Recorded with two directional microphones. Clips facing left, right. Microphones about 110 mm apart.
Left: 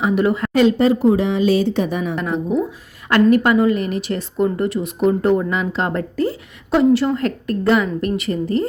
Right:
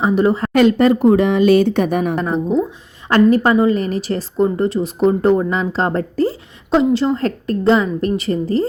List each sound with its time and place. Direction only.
0.0 s speech: 30° right (ahead or behind)
0.5 s speech: 60° right (ahead or behind)
2.1 s speech: 35° right (ahead or behind)